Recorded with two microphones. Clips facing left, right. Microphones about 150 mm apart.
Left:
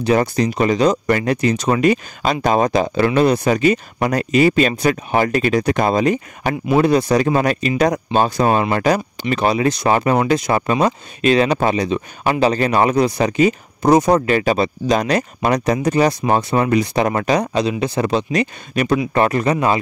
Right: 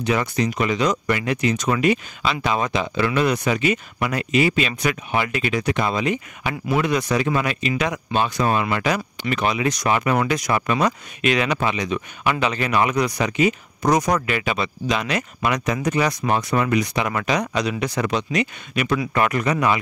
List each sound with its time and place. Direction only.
0.0 s speech: 35° left (ahead or behind)